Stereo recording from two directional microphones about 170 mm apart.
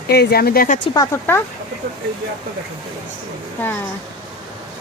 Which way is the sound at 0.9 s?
20° left (ahead or behind).